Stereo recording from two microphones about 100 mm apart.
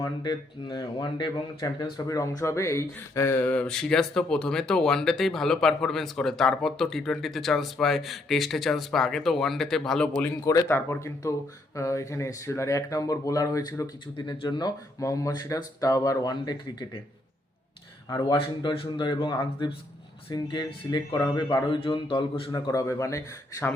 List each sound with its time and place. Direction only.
0.0 s speech: 45° left (ahead or behind); by 3.4 s 25° left (ahead or behind)
3.4 s speech: 10° left (ahead or behind)
10.7 s speech: 25° left (ahead or behind); by 17.0 s 45° left (ahead or behind)
18.3 s mantra: 65° left (ahead or behind)
18.9 s speech: 50° left (ahead or behind)
21.8 s mantra: 55° left (ahead or behind)
22.5 s speech: 35° left (ahead or behind)